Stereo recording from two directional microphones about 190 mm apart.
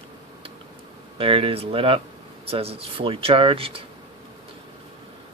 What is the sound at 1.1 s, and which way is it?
Speech, 30° right (ahead or behind).